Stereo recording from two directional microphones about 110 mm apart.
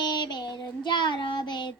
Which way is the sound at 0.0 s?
40° left (ahead or behind).